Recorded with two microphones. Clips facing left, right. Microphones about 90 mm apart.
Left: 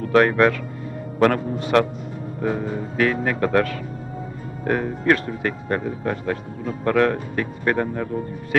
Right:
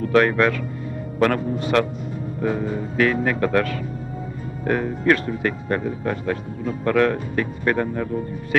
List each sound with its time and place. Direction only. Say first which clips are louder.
0.1 s speech: left 2 dB; 30° left (ahead or behind)
3.0 s speech: right 1 dB; 30° left (ahead or behind)